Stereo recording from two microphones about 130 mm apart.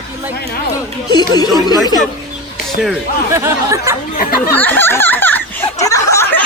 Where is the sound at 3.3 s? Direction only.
20° right (ahead or behind).